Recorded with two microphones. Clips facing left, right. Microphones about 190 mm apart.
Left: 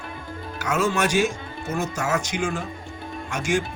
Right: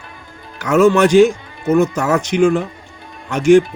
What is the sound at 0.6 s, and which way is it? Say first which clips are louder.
Speech: right 12 dB; 65° right (ahead or behind).